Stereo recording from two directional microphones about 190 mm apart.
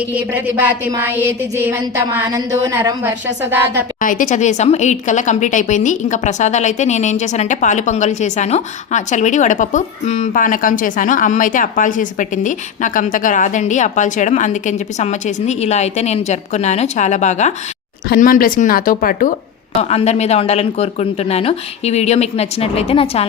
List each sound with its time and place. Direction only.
0.1 s a sound: 10° right (ahead or behind)
4.0 s a woman's voice: 45° left (ahead or behind)
18.1 s speech: 50° left (ahead or behind)
19.8 s a woman's voice: 35° left (ahead or behind)